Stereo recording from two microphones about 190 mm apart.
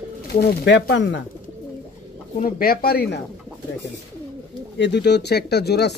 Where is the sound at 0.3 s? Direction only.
55° left (ahead or behind); by 1.2 s 70° left (ahead or behind).